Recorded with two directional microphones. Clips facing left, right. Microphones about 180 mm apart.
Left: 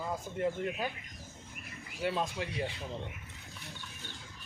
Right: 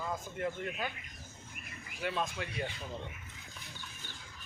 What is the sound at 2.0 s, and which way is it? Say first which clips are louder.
Speech: left 2 dB; 30° left (ahead or behind).